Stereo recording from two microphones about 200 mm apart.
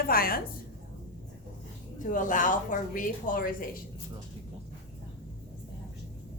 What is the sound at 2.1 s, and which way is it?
Speech, 40° left (ahead or behind).